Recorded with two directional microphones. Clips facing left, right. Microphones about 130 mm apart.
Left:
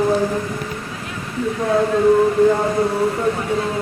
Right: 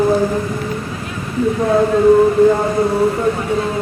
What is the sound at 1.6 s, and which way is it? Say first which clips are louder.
Speech: right 2 dB; 30° right (ahead or behind).